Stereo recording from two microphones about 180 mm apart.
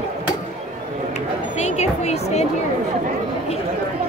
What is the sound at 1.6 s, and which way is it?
Speech, 35° left (ahead or behind).